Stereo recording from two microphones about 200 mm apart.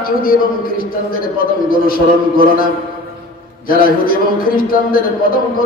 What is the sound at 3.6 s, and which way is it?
A man's voice, 45° left (ahead or behind).